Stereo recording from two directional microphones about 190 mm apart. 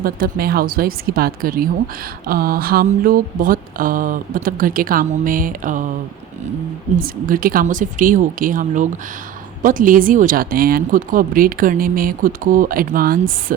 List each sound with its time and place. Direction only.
0.0 s mantra: 50° right (ahead or behind)
6.9 s mantra: 45° right (ahead or behind)